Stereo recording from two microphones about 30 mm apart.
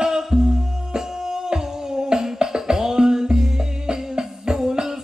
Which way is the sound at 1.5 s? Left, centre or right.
Right.